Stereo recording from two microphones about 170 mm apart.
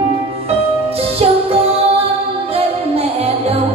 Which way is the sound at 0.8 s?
35° right (ahead or behind).